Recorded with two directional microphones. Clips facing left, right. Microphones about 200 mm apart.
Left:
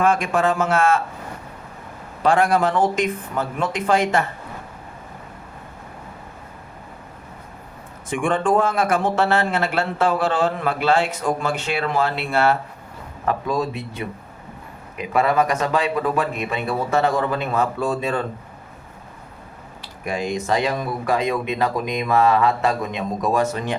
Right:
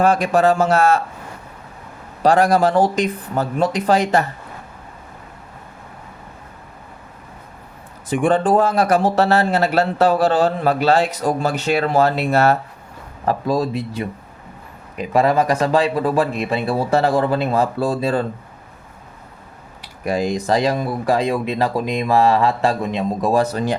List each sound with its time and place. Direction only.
0.0 s speech: 35° right (ahead or behind)
2.2 s speech: 35° right (ahead or behind)
8.1 s speech: 35° right (ahead or behind)
20.1 s speech: 35° right (ahead or behind)